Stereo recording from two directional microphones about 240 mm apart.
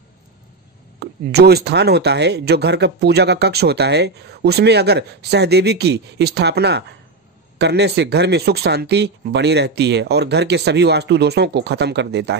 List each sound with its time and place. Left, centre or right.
0.9 s speech: right